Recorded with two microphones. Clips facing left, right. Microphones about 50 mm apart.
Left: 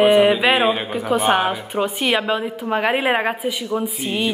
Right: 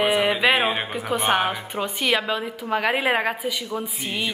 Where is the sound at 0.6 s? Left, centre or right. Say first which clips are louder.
Left 5 dB; centre.